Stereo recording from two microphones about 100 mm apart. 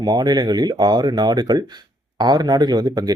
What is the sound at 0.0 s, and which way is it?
Speech, 45° right (ahead or behind).